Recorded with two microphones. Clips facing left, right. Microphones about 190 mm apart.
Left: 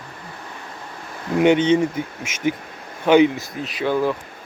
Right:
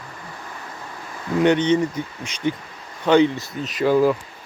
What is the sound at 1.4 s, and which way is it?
Speech, 10° left (ahead or behind).